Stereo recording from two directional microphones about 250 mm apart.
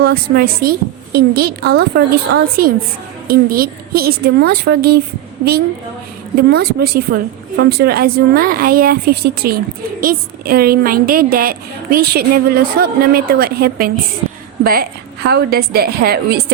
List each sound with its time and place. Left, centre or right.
0.0 s a woman's voice: right
6.3 s a woman's voice: right